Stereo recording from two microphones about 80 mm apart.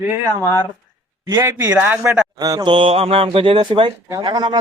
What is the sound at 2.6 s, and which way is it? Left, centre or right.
Mantra, right.